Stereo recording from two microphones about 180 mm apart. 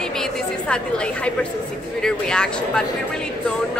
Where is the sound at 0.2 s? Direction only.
5° left (ahead or behind).